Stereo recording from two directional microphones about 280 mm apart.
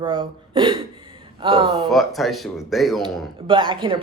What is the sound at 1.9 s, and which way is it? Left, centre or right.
Speech, centre.